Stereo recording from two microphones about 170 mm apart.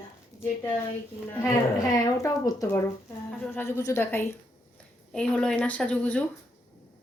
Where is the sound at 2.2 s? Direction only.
20° left (ahead or behind).